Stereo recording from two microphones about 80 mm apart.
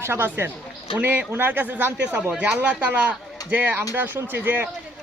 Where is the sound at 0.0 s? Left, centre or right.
Right.